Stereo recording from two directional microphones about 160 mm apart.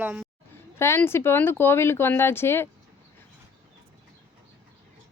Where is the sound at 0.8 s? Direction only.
15° left (ahead or behind).